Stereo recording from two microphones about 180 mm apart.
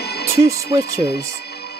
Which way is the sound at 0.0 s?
65° left (ahead or behind).